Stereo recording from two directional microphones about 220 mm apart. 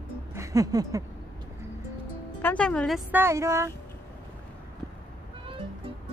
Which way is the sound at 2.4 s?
5° left (ahead or behind).